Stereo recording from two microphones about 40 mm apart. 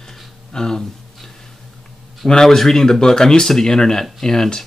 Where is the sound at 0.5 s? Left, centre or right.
Centre.